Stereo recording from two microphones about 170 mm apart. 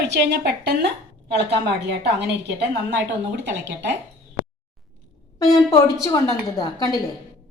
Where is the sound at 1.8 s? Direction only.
85° right.